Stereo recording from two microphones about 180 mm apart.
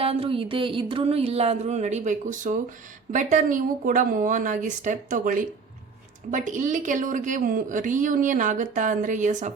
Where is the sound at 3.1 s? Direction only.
45° right (ahead or behind).